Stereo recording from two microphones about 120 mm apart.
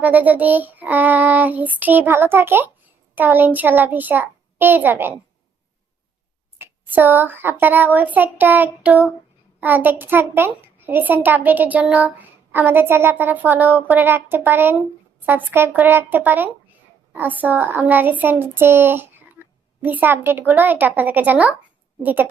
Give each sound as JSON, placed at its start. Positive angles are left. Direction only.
{"t": 0.0, "sound": "a child's voice", "side_deg": -15}
{"t": 6.6, "sound": "a child's voice", "side_deg": -15}